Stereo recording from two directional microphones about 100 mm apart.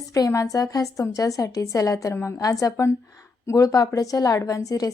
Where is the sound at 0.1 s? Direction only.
35° left (ahead or behind).